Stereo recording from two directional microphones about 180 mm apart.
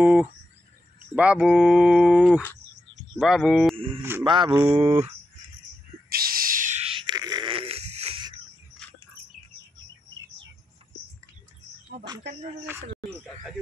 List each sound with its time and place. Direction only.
0.0 s cricket: 10° right (ahead or behind)
1.1 s speech: 5° right (ahead or behind)
3.7 s speech: 30° right (ahead or behind)
4.5 s speech: 15° right (ahead or behind)
4.7 s speech: 35° right (ahead or behind)
6.0 s a sound: 55° right (ahead or behind); by 8.4 s 30° right (ahead or behind)